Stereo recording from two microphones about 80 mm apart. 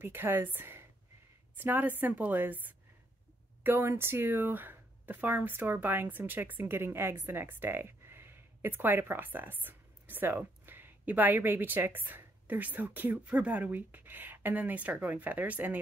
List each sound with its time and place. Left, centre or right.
0.0 s a woman's voice: right
3.6 s speech: right